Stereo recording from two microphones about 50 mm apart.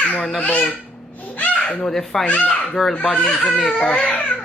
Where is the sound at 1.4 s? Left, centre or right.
Left.